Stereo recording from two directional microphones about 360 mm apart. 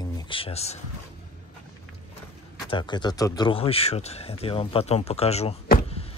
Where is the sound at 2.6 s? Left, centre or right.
Centre.